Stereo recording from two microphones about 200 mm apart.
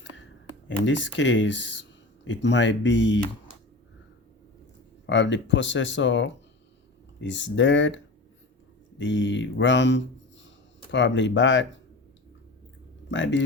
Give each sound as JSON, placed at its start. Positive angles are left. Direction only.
{"t": 0.9, "sound": "speech", "side_deg": 65}
{"t": 5.0, "sound": "speech", "side_deg": 65}
{"t": 13.1, "sound": "speech", "side_deg": 65}